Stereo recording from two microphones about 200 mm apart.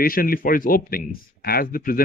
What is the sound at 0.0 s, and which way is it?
Speech, 45° left (ahead or behind).